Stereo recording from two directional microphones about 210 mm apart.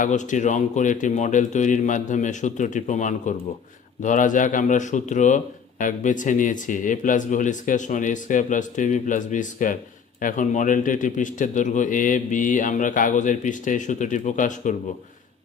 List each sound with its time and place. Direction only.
0.0 s speech: 35° left (ahead or behind)